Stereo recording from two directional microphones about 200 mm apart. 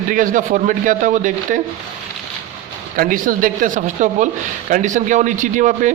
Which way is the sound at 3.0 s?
40° right (ahead or behind).